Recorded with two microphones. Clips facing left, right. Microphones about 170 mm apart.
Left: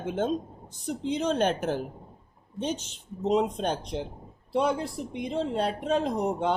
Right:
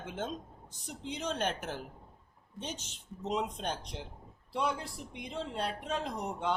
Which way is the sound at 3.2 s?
25° left (ahead or behind).